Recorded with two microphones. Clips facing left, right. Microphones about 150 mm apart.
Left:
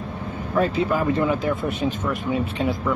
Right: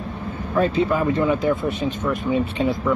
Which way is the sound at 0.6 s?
Centre (ahead or behind).